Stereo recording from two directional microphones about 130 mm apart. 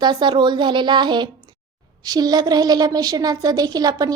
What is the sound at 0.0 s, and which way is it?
A woman's voice, 35° right (ahead or behind).